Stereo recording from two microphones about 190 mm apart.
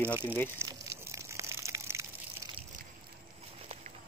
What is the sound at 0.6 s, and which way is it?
Crushing, 15° right (ahead or behind).